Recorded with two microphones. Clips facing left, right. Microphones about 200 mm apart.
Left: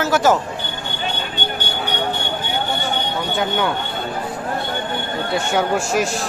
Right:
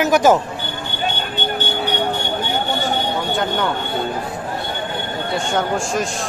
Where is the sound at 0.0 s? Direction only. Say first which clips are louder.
Right 3 dB; 15° right (ahead or behind).